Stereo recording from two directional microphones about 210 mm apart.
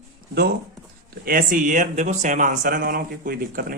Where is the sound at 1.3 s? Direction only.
40° right (ahead or behind).